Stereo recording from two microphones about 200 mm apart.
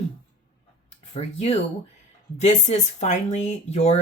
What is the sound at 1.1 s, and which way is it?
Speech, 30° left (ahead or behind).